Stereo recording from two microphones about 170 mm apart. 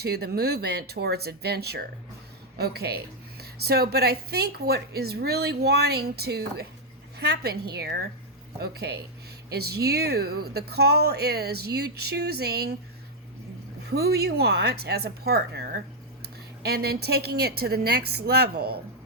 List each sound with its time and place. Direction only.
0.0 s a woman's voice: 70° right (ahead or behind)
13.8 s a woman's voice: 70° right (ahead or behind)